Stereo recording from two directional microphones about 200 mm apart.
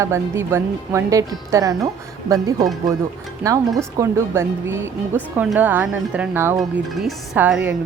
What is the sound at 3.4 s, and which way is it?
Speech, 15° right (ahead or behind).